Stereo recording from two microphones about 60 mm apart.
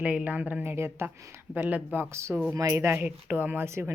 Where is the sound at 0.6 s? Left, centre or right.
Right.